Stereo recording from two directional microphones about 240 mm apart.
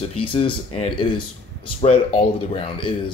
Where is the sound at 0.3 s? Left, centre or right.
Left.